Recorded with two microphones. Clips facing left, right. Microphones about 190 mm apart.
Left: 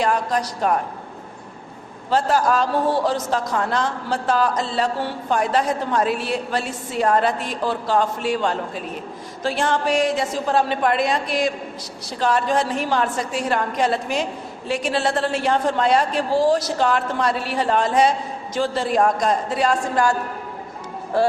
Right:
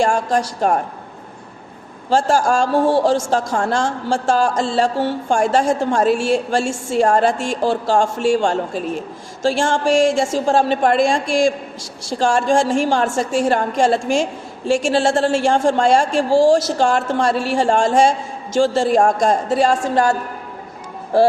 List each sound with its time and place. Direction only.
0.0 s a woman's voice: 30° right (ahead or behind)
2.0 s a woman's voice: 30° right (ahead or behind)
18.9 s a man's voice: 45° right (ahead or behind)
19.5 s a woman's voice: 30° right (ahead or behind)